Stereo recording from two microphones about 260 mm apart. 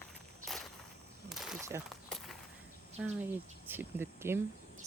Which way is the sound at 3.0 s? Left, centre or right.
Centre.